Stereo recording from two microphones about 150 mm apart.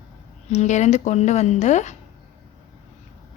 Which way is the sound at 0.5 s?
50° left (ahead or behind).